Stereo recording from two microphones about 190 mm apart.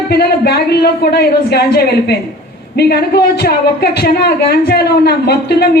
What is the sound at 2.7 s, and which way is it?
A woman's voice, 55° left (ahead or behind).